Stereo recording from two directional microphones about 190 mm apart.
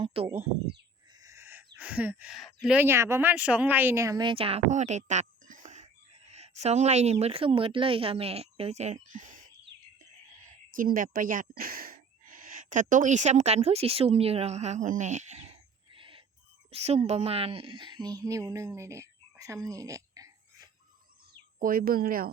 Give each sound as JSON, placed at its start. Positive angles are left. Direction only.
{"t": 0.0, "sound": "a sound", "side_deg": -30}
{"t": 1.2, "sound": "speech", "side_deg": -15}
{"t": 10.8, "sound": "speech", "side_deg": -45}
{"t": 15.9, "sound": "a sound", "side_deg": -25}
{"t": 16.7, "sound": "a woman's voice", "side_deg": -35}
{"t": 21.6, "sound": "speech", "side_deg": -50}